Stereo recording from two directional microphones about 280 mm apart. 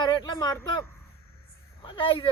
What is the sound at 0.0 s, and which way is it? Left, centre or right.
Speech, centre.